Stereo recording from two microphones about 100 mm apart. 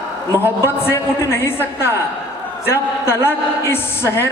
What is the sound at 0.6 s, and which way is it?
A woman's voice, 25° left (ahead or behind).